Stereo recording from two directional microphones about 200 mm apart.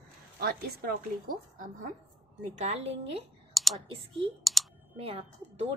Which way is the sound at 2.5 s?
35° right (ahead or behind).